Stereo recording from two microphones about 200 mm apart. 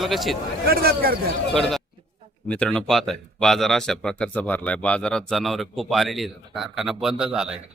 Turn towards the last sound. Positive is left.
turn(degrees=-5)  # may be behind; listen again after turning